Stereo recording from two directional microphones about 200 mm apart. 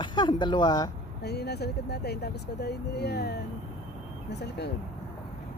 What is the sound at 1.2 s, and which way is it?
Speech, 55° left (ahead or behind).